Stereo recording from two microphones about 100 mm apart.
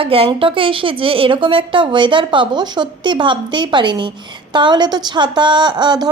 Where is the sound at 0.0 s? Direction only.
70° right (ahead or behind).